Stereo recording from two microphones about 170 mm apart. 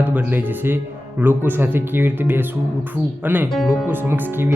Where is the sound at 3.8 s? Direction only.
10° right (ahead or behind).